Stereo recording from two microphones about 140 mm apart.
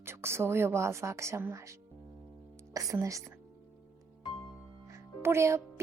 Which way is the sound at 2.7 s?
25° right (ahead or behind).